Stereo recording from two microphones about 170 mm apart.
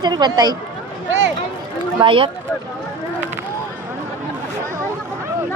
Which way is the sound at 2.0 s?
30° right (ahead or behind).